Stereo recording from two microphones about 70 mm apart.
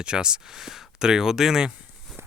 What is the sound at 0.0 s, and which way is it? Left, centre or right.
Speech, centre.